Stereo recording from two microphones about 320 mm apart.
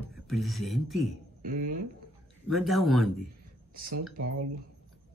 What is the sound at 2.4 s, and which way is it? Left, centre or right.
Speech, centre.